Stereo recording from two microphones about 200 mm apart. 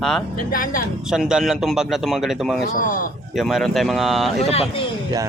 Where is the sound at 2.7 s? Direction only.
45° left (ahead or behind).